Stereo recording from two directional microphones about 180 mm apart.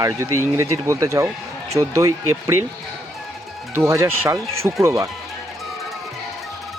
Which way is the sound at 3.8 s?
15° right (ahead or behind).